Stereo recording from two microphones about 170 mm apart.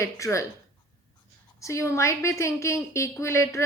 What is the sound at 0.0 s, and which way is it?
Speech, 15° left (ahead or behind).